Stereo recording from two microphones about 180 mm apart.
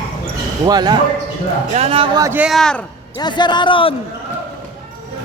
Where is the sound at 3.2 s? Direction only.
25° left (ahead or behind).